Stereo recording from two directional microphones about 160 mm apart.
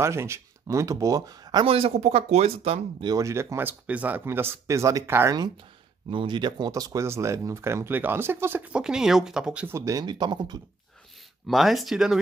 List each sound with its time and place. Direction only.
0.0 s speech: 15° right (ahead or behind)
6.0 s speech: 30° right (ahead or behind); by 9.8 s 5° right (ahead or behind)
9.8 s speech: 20° right (ahead or behind)
11.4 s speech: centre (ahead or behind)